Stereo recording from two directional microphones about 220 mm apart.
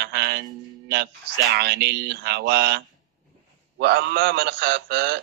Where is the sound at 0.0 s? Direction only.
50° right (ahead or behind).